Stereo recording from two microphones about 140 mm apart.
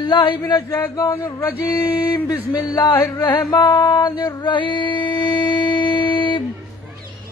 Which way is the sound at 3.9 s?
35° left (ahead or behind).